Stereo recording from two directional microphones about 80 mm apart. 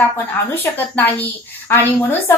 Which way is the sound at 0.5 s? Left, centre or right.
Left.